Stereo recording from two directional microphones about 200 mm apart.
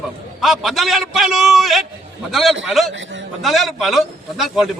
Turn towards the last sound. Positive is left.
turn(degrees=0)  # may be behind; listen again after turning